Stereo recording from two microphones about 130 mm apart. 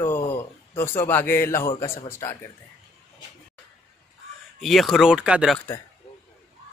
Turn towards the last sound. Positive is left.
turn(degrees=-5)  # may be behind; listen again after turning